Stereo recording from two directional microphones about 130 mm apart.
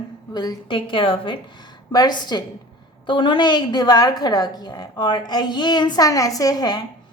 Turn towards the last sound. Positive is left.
turn(degrees=30)  # may be behind; listen again after turning